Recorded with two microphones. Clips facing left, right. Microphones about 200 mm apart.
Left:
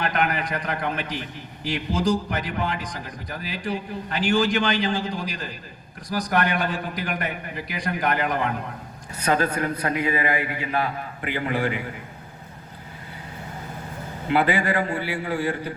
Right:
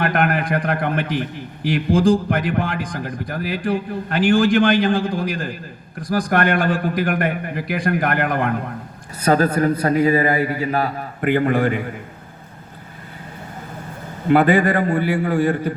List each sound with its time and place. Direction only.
0.0 s a man's voice: 55° right (ahead or behind)
9.2 s a man's voice: 40° right (ahead or behind)
14.3 s a man's voice: 50° right (ahead or behind)